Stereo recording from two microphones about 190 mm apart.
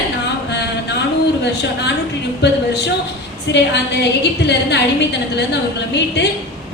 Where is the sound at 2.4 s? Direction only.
65° left (ahead or behind).